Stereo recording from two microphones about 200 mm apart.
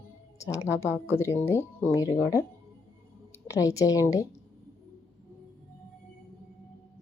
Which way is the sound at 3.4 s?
15° left (ahead or behind).